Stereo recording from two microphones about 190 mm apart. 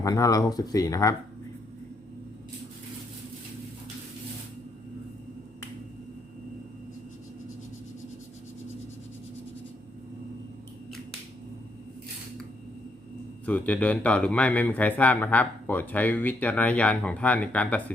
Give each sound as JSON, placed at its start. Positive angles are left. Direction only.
{"t": 0.0, "sound": "speech", "side_deg": 20}
{"t": 13.4, "sound": "speech", "side_deg": 10}